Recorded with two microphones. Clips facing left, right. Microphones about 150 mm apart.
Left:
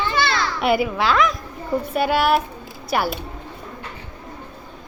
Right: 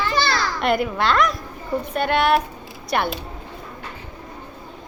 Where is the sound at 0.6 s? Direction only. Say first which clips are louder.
Left 2 dB; 5° left (ahead or behind).